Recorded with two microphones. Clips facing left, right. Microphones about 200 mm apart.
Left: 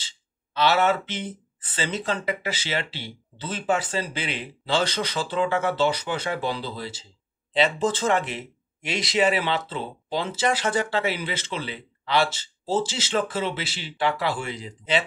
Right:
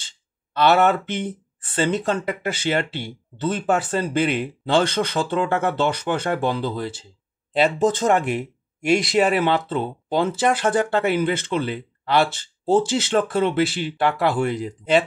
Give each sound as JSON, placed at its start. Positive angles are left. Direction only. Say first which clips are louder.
{"t": 0.6, "sound": "speech", "louder": "right 4 dB", "side_deg": -55}